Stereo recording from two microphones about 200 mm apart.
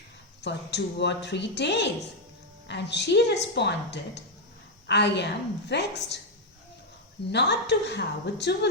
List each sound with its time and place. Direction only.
0.4 s a woman's voice: 60° left (ahead or behind)
7.3 s a woman's voice: 60° left (ahead or behind)